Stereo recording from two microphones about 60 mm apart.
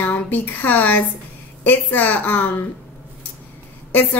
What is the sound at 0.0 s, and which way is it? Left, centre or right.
A woman's voice, left.